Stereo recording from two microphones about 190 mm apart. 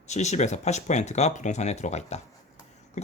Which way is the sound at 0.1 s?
35° left (ahead or behind).